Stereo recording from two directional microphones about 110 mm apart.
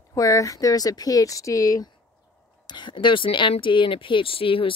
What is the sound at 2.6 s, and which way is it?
Speech, 45° left (ahead or behind).